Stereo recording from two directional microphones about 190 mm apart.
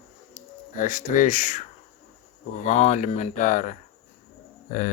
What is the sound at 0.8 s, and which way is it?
Speech, 45° left (ahead or behind).